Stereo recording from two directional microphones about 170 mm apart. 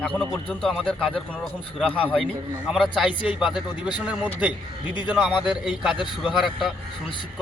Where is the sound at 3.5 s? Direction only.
25° left (ahead or behind).